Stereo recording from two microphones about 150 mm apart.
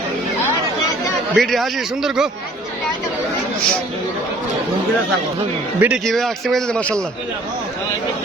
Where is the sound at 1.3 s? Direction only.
Centre (ahead or behind).